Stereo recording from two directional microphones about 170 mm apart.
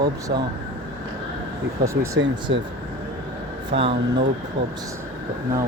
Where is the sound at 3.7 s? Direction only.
30° right (ahead or behind).